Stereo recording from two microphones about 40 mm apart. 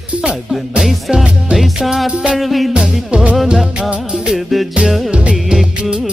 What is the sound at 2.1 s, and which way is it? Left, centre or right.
Music, right.